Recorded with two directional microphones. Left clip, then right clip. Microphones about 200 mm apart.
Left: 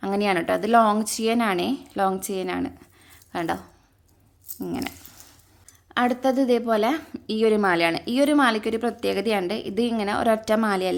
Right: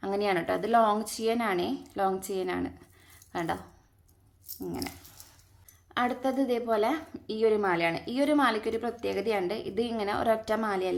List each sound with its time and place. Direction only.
0.0 s a woman's voice: 35° left (ahead or behind)
4.6 s a woman's voice: 40° left (ahead or behind)